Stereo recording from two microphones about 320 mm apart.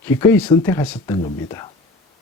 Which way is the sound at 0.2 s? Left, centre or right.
Centre.